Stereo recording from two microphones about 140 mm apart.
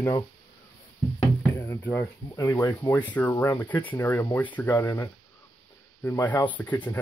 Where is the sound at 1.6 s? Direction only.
15° left (ahead or behind).